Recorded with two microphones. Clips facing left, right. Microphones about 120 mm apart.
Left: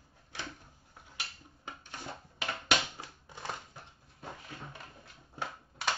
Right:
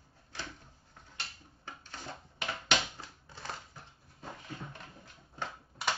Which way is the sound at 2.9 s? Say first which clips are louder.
Left 2 dB; 15° left (ahead or behind).